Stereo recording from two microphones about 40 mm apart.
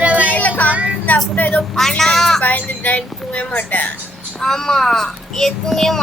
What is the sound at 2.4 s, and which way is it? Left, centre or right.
A woman's voice, left.